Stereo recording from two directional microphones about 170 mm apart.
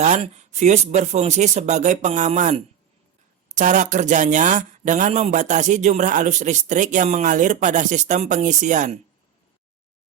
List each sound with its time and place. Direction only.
0.0 s speech: 45° right (ahead or behind)